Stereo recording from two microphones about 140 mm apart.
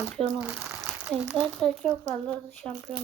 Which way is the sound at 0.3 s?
10° right (ahead or behind).